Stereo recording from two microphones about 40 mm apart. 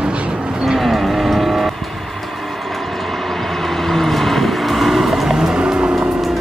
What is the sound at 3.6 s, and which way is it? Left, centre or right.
Vehicle, centre.